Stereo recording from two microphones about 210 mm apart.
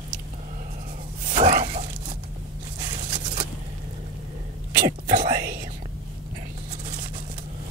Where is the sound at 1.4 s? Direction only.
40° right (ahead or behind).